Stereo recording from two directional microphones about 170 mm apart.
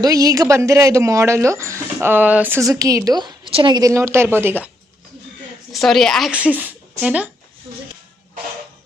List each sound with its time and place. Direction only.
0.0 s speech: 20° right (ahead or behind)
5.7 s a woman's voice: centre (ahead or behind)